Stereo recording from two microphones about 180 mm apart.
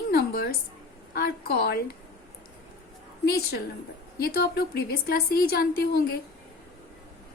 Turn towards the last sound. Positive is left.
turn(degrees=60)  # may be behind; listen again after turning